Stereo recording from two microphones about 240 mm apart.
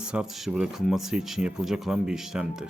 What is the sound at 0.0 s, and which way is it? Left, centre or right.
Speech, centre.